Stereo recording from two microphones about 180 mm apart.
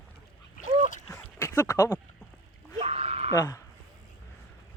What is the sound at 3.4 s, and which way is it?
Speech, 20° left (ahead or behind).